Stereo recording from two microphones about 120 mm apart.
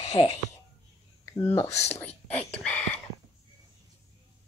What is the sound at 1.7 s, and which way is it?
Speech, 65° left (ahead or behind).